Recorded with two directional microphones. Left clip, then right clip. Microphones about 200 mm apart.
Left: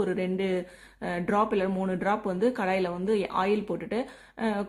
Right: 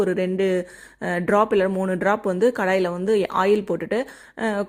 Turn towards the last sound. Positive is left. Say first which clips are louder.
# right 8 dB
turn(degrees=-30)  # may be behind; listen again after turning